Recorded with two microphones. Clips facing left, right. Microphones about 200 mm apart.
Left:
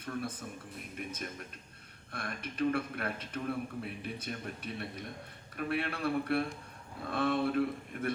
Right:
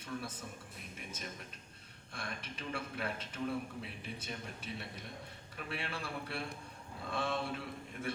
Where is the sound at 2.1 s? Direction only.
55° left (ahead or behind).